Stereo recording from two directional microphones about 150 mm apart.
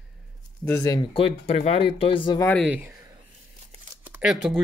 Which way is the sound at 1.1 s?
40° left (ahead or behind).